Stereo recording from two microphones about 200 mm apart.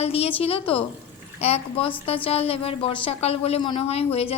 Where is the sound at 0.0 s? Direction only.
30° left (ahead or behind).